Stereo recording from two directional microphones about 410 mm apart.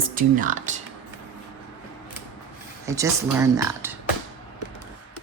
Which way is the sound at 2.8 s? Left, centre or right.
Centre.